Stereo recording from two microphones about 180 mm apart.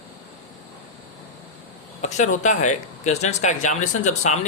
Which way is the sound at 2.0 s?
40° left (ahead or behind).